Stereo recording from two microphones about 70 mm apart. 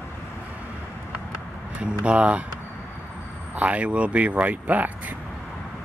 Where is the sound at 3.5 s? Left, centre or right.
Centre.